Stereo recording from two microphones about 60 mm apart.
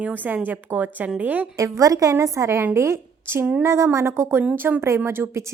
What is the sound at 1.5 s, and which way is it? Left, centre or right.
A woman's voice, right.